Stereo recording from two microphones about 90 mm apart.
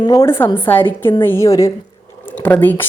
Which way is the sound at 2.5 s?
20° left (ahead or behind).